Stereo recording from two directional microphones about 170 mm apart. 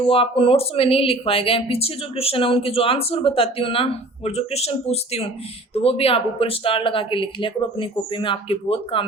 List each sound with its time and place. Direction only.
0.0 s speech: 30° left (ahead or behind)